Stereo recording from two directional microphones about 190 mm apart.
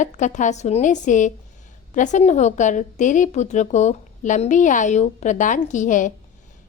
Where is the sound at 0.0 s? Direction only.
40° left (ahead or behind).